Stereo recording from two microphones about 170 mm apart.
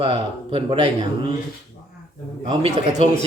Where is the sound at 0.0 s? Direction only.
35° right (ahead or behind).